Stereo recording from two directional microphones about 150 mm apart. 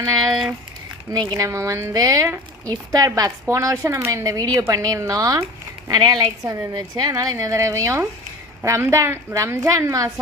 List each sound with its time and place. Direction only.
0.0 s speech: 25° right (ahead or behind)